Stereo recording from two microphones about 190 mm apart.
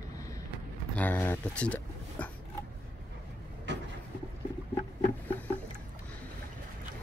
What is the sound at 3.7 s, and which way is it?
Vehicle, 70° right (ahead or behind).